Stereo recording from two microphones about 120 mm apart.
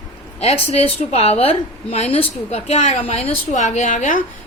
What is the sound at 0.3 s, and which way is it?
A woman's voice, 60° left (ahead or behind).